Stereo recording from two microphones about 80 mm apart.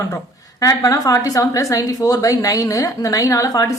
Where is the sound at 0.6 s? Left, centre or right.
Left.